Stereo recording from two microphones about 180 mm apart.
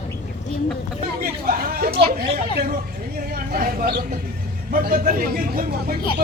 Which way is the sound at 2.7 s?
55° right (ahead or behind).